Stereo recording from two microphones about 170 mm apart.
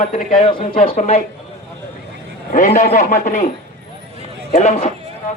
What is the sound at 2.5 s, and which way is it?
Speech, 50° left (ahead or behind).